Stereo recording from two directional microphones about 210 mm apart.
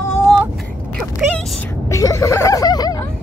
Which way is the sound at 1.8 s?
15° left (ahead or behind).